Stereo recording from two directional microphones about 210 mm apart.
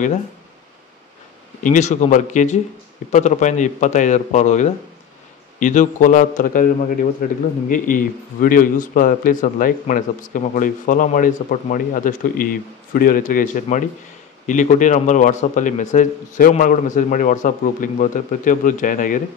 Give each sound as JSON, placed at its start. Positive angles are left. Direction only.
{"t": 1.6, "sound": "a man's voice", "side_deg": 35}